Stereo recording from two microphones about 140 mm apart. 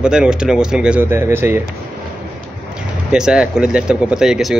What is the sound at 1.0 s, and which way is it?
Speech, 15° right (ahead or behind).